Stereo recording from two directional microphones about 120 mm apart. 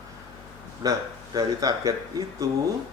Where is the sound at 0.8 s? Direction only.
30° right (ahead or behind).